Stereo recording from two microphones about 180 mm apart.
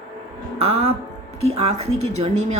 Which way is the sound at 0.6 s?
35° right (ahead or behind).